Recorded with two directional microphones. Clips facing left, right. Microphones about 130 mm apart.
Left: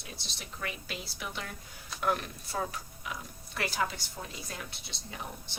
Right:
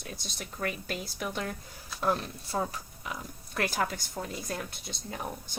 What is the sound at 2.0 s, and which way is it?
Speech, 30° right (ahead or behind).